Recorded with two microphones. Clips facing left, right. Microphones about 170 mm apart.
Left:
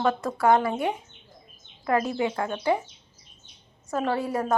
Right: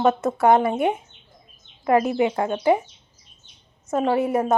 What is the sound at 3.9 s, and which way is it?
Speech, 20° right (ahead or behind).